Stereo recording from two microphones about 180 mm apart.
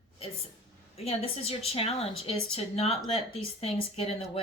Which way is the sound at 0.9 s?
35° left (ahead or behind).